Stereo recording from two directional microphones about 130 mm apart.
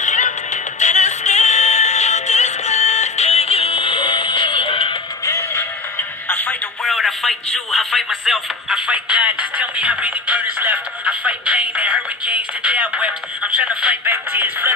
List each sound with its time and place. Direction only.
0.0 s music: 70° left (ahead or behind); by 4.9 s 40° left (ahead or behind)
5.2 s music: 20° left (ahead or behind)
6.8 s a sound: centre (ahead or behind); by 14.7 s 15° right (ahead or behind)